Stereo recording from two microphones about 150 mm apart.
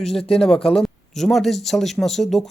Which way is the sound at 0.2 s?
40° left (ahead or behind).